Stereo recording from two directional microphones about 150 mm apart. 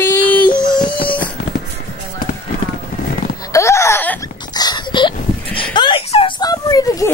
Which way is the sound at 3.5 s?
20° left (ahead or behind).